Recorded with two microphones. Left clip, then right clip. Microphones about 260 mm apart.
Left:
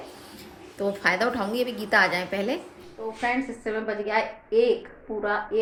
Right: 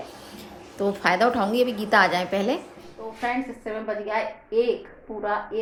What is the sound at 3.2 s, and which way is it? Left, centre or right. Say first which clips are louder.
A woman's voice: even; centre.